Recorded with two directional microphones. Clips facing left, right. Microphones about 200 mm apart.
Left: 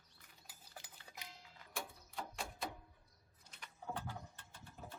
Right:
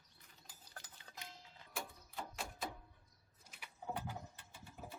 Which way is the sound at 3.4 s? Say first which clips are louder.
Right 1 dB; 10° right (ahead or behind).